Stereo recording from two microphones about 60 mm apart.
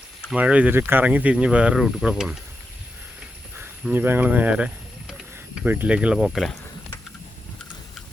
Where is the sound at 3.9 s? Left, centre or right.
Right.